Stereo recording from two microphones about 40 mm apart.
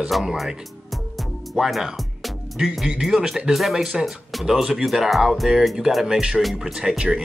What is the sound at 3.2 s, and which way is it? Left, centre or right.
Speech, centre.